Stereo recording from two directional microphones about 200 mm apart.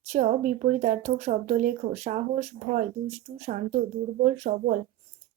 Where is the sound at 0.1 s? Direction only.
40° right (ahead or behind).